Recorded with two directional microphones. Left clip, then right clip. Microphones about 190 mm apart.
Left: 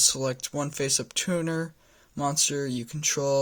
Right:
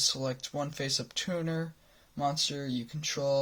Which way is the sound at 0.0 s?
60° left (ahead or behind).